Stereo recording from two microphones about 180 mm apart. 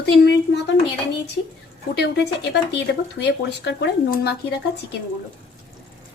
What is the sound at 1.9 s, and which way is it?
Speech, 65° left (ahead or behind).